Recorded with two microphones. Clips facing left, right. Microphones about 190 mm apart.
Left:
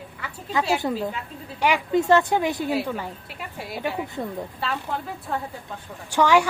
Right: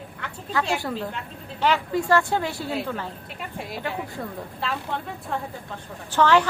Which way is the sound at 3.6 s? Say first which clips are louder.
Left 3 dB; centre (ahead or behind).